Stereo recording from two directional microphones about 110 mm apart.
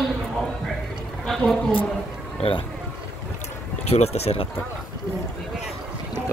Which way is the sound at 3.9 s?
75° left (ahead or behind).